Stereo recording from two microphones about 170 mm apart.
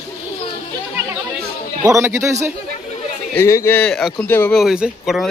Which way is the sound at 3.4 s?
15° left (ahead or behind).